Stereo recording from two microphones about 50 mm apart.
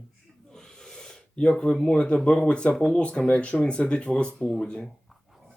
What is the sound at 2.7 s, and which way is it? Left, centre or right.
Speech, centre.